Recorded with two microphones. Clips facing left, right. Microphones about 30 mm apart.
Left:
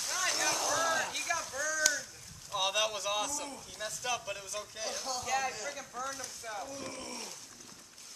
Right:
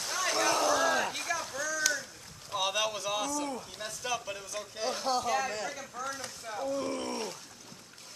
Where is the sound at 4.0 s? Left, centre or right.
Centre.